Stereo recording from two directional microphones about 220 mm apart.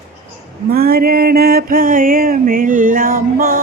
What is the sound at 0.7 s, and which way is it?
Mantra, 45° right (ahead or behind).